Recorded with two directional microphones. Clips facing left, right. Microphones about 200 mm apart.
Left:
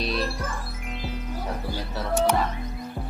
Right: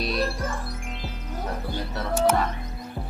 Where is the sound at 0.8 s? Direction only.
Centre (ahead or behind).